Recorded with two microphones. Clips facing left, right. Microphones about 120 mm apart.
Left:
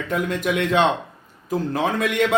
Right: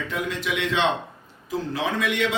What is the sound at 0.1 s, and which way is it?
A man's voice, 50° left (ahead or behind).